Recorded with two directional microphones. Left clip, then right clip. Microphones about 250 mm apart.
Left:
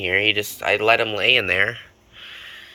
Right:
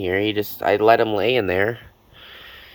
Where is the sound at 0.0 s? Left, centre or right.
Right.